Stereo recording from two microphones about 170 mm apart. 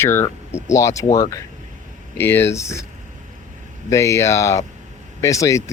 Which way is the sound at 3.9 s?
15° left (ahead or behind).